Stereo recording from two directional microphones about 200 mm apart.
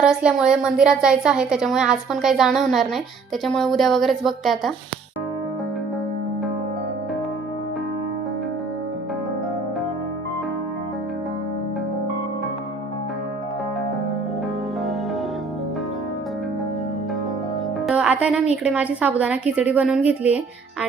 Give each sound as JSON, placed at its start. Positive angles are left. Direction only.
{"t": 0.0, "sound": "a woman's voice", "side_deg": -5}
{"t": 17.8, "sound": "music", "side_deg": -5}
{"t": 18.5, "sound": "a woman's voice", "side_deg": -5}